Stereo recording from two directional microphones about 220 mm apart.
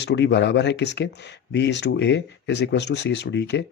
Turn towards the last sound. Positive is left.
turn(degrees=50)  # may be behind; listen again after turning